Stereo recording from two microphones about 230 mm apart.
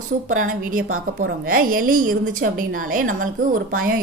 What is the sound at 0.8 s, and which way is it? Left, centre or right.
Speech, right.